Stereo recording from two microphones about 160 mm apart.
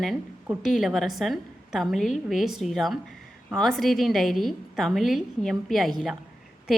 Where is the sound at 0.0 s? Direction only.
Centre (ahead or behind).